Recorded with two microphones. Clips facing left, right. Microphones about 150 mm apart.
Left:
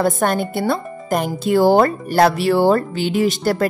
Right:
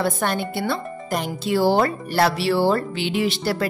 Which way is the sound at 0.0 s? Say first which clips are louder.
Left 5 dB; 45° left (ahead or behind).